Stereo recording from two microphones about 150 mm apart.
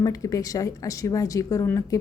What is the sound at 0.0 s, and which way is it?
A woman's voice, 25° left (ahead or behind).